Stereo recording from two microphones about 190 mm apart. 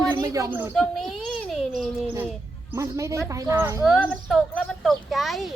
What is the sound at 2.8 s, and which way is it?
Speech, 15° right (ahead or behind).